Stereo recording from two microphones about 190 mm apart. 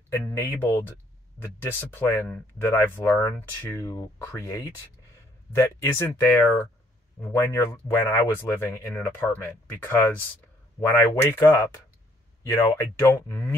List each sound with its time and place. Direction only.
0.3 s speech: 15° left (ahead or behind)